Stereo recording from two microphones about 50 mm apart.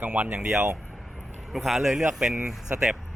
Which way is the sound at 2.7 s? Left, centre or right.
Right.